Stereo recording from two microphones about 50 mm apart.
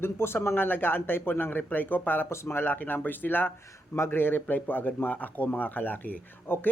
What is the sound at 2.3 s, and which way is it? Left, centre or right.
Speech, left.